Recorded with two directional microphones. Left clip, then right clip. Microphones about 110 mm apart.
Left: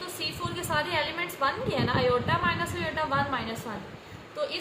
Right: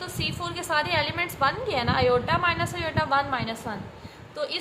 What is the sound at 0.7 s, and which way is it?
A woman's voice, 55° right (ahead or behind).